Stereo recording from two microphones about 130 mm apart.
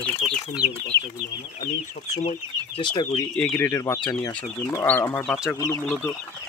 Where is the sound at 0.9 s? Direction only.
35° right (ahead or behind).